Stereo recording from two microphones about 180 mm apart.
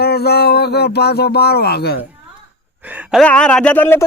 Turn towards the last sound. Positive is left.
turn(degrees=10)  # may be behind; listen again after turning